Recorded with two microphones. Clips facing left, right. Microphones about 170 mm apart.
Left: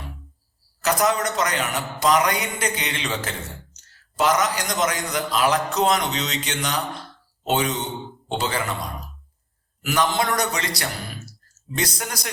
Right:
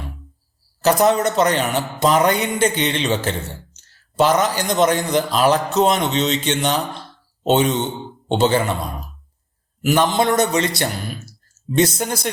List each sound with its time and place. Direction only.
0.8 s a man's voice: 30° right (ahead or behind)
9.8 s a man's voice: 25° right (ahead or behind)